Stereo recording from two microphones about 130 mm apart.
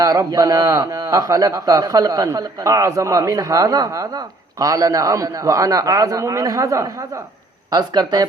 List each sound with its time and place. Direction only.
0.0 s speech: 30° right (ahead or behind)